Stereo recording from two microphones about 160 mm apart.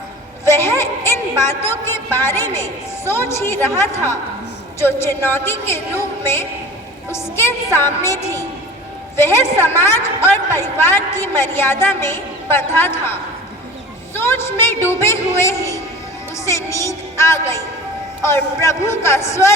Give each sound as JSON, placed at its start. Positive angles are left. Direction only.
{"t": 0.4, "sound": "a man's voice", "side_deg": 15}
{"t": 14.1, "sound": "a woman's voice", "side_deg": 15}